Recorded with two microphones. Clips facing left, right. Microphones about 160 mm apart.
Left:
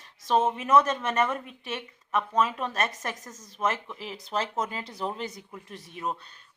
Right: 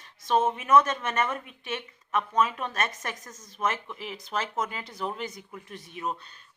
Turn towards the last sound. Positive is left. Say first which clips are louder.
# even
turn(degrees=35)  # may be behind; listen again after turning